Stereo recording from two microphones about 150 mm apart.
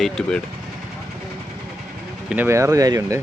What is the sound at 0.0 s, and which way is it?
Speech, 5° left (ahead or behind).